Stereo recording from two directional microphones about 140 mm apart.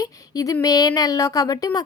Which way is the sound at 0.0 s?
25° left (ahead or behind).